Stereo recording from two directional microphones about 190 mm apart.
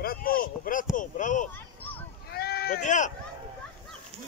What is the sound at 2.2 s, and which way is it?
Sheep, 55° left (ahead or behind).